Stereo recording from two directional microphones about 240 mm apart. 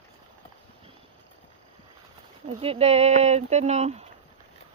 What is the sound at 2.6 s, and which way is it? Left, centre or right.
Speech, right.